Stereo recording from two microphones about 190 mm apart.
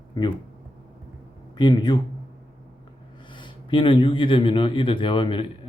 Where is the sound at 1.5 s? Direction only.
20° left (ahead or behind).